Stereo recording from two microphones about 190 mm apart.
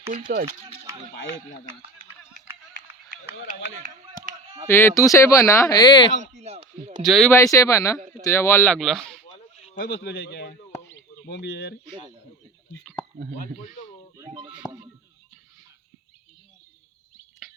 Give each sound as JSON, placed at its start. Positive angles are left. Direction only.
{"t": 0.1, "sound": "speech", "side_deg": -45}
{"t": 2.8, "sound": "a sound", "side_deg": -45}
{"t": 3.4, "sound": "speech", "side_deg": -45}
{"t": 4.7, "sound": "speech", "side_deg": 10}
{"t": 6.3, "sound": "speech", "side_deg": -35}
{"t": 7.0, "sound": "speech", "side_deg": 0}
{"t": 7.3, "sound": "speech", "side_deg": 15}
{"t": 9.8, "sound": "speech", "side_deg": 65}
{"t": 13.1, "sound": "speech", "side_deg": -50}
{"t": 14.2, "sound": "speech", "side_deg": -25}